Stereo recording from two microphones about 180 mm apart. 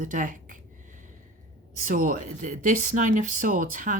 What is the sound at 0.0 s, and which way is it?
Speech, 45° right (ahead or behind).